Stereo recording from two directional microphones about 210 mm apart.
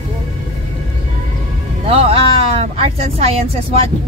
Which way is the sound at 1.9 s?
30° right (ahead or behind).